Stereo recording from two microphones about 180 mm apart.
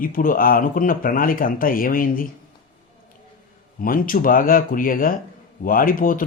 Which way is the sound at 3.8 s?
50° left (ahead or behind).